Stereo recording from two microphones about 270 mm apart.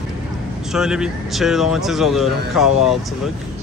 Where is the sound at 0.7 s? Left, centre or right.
Centre.